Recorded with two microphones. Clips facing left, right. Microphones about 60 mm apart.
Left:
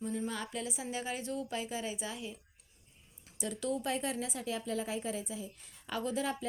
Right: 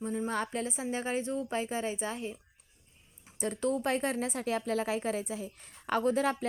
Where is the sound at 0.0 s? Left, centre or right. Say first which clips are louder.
Right 3 dB; right.